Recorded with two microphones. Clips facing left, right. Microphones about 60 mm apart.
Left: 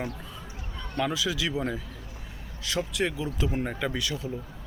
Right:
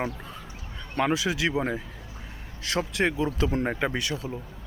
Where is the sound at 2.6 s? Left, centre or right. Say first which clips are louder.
Right 3 dB; right.